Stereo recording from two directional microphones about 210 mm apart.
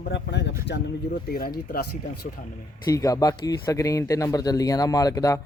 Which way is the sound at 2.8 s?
15° left (ahead or behind).